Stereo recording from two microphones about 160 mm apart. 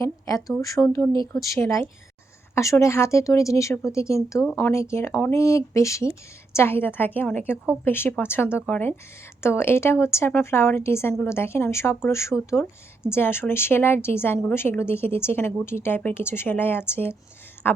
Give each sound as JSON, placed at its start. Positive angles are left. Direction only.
{"t": 0.0, "sound": "speech", "side_deg": 20}